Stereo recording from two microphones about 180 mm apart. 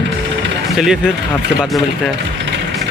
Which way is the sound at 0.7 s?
Centre (ahead or behind).